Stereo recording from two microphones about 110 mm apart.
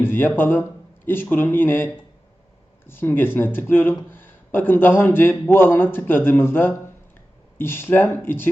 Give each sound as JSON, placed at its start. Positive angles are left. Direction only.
{"t": 0.0, "sound": "speech", "side_deg": 20}